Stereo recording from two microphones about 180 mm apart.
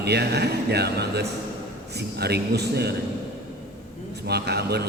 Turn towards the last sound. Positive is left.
turn(degrees=-65)  # may be behind; listen again after turning